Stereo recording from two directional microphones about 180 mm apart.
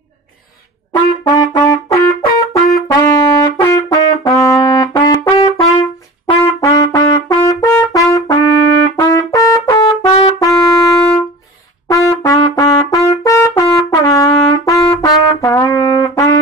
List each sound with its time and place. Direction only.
0.9 s trumpet: 20° left (ahead or behind)
3.1 s brass instrument: 20° left (ahead or behind)
3.6 s trumpet: 20° left (ahead or behind)